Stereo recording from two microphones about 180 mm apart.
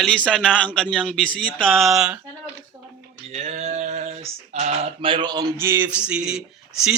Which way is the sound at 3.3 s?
35° right (ahead or behind).